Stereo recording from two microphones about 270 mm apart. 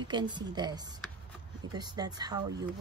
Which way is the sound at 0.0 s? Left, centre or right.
Centre.